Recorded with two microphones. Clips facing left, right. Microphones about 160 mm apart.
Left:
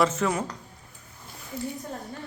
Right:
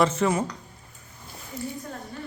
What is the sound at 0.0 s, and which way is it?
Speech, centre (ahead or behind).